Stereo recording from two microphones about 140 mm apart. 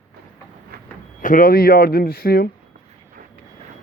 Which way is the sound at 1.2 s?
75° left (ahead or behind).